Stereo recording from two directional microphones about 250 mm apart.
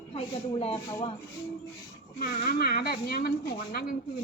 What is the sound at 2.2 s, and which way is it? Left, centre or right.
Speech, left.